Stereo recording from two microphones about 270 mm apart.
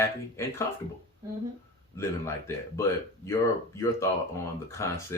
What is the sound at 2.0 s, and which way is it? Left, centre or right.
Speech, centre.